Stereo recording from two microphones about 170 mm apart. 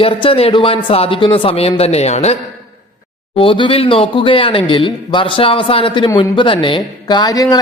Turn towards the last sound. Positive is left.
turn(degrees=20)  # may be behind; listen again after turning